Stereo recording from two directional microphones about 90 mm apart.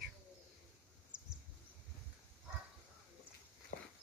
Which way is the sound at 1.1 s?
60° right (ahead or behind).